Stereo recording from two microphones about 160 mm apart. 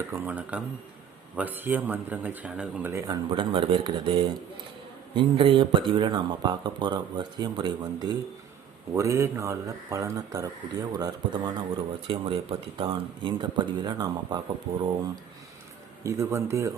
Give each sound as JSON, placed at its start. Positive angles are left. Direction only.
{"t": 0.1, "sound": "speech", "side_deg": -10}
{"t": 3.3, "sound": "speech", "side_deg": -30}